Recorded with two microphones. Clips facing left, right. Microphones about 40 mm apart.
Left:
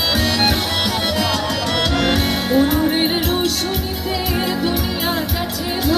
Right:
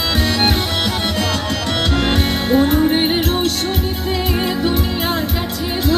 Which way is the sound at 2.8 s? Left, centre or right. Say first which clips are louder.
Right 2 dB; centre.